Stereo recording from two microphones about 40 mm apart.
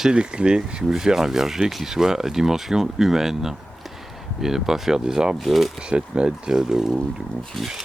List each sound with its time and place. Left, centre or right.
0.1 s speech: right
5.5 s speech: centre
5.9 s speech: right
6.6 s speech: centre